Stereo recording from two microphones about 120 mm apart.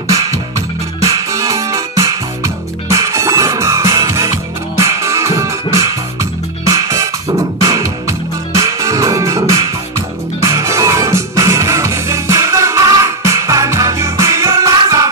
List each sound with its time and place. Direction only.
1.0 s music: 25° right (ahead or behind)